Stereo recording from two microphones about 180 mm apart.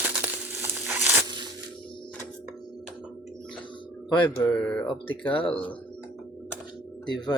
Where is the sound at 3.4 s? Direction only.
5° left (ahead or behind).